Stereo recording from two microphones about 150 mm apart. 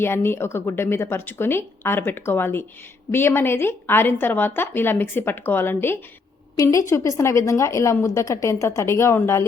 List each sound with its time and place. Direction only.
0.0 s a woman's voice: 15° left (ahead or behind)